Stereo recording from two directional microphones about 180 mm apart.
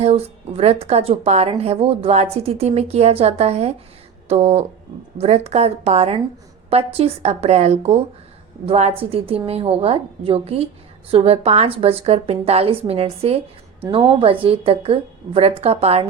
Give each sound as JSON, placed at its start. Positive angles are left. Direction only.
{"t": 0.0, "sound": "speech", "side_deg": -35}